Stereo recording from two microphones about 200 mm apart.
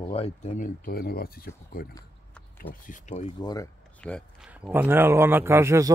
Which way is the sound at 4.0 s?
5° left (ahead or behind).